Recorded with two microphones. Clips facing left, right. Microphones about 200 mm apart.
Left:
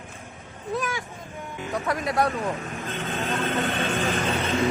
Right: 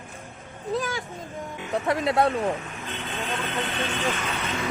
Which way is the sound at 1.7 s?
25° right (ahead or behind).